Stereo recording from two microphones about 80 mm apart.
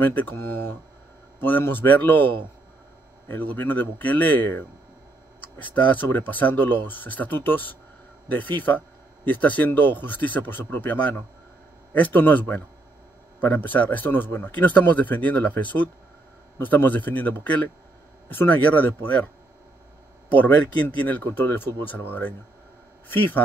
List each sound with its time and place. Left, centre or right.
0.0 s a man's voice: left
20.3 s a man's voice: left